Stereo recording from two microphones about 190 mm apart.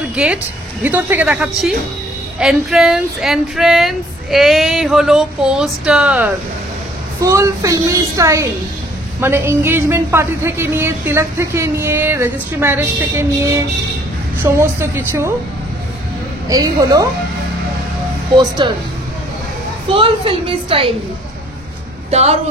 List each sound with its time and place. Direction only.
0.1 s speech: 5° right (ahead or behind)
16.4 s speech: 20° right (ahead or behind)
18.3 s a woman's voice: 25° right (ahead or behind)
19.9 s a woman's voice: 30° right (ahead or behind)
22.1 s a woman's voice: 35° right (ahead or behind)